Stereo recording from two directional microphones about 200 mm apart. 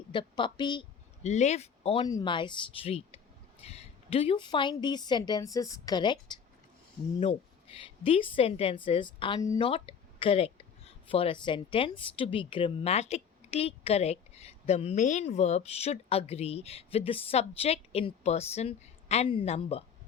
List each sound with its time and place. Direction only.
0.1 s a woman's voice: 25° left (ahead or behind)
1.2 s a woman's voice: 35° left (ahead or behind)